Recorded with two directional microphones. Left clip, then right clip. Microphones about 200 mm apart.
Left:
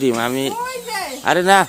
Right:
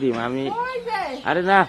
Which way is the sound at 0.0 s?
70° left (ahead or behind).